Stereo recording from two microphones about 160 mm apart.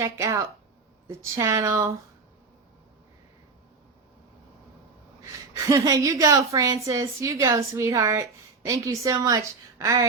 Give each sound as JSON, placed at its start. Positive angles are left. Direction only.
{"t": 0.0, "sound": "a woman's voice", "side_deg": -20}
{"t": 5.2, "sound": "a woman's voice", "side_deg": -20}